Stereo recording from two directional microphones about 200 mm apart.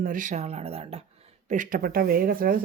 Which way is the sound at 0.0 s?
40° right (ahead or behind).